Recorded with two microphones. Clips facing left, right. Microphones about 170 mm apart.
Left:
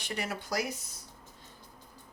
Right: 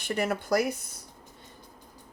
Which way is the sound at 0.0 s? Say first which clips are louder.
Right 8 dB; 50° right (ahead or behind).